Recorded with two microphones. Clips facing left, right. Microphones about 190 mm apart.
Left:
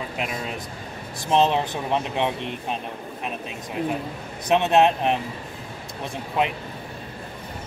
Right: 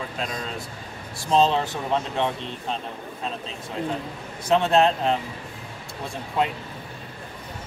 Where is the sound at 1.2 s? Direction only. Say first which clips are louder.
Even; 20° left (ahead or behind).